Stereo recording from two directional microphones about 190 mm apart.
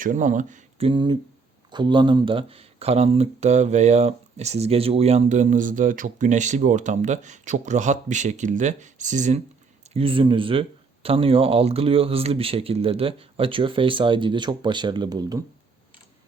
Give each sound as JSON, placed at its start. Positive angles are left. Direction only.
{"t": 0.0, "sound": "speech", "side_deg": -45}
{"t": 0.9, "sound": "speech", "side_deg": -25}
{"t": 9.9, "sound": "speech", "side_deg": -30}